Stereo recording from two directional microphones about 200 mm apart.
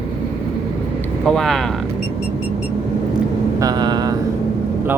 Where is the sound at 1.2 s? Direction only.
Centre (ahead or behind).